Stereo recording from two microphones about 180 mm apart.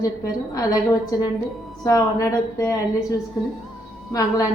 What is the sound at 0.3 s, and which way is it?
Speech, 20° left (ahead or behind).